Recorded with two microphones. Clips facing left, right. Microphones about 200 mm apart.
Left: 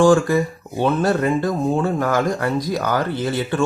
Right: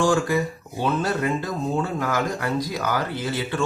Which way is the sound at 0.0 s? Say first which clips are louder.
Left 7 dB; 55° left (ahead or behind).